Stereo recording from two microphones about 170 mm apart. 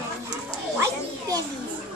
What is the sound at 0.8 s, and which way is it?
Children playing, 20° right (ahead or behind).